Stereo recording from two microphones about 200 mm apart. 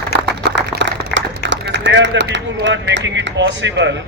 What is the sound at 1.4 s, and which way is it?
A man's voice, 60° right (ahead or behind).